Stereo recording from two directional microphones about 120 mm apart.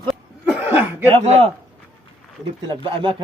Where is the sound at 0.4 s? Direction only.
15° right (ahead or behind).